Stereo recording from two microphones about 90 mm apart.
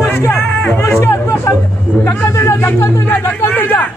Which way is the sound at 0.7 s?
25° left (ahead or behind).